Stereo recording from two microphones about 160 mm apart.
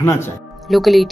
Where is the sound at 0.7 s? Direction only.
Centre (ahead or behind).